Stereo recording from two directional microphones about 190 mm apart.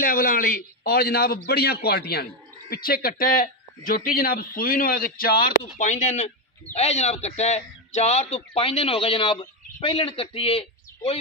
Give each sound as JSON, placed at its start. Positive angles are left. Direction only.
{"t": 0.0, "sound": "a man's voice", "side_deg": 45}